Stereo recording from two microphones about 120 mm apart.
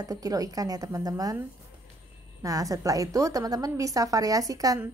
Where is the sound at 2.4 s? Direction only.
30° right (ahead or behind).